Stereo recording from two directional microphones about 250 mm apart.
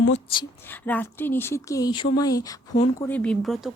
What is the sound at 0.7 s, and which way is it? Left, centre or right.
Speech, centre.